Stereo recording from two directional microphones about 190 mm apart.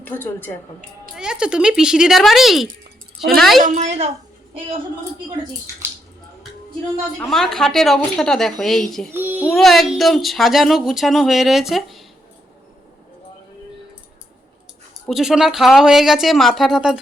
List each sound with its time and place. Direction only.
0.0 s a woman's voice: 10° left (ahead or behind)
1.1 s speech: 5° right (ahead or behind)
3.6 s a woman's voice: 35° right (ahead or behind)
7.2 s speech: centre (ahead or behind)
9.1 s a child's voice: 10° right (ahead or behind)
9.5 s speech: centre (ahead or behind)
15.0 s speech: centre (ahead or behind)